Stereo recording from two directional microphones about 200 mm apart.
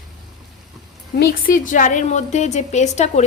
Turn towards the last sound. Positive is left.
turn(degrees=35)  # may be behind; listen again after turning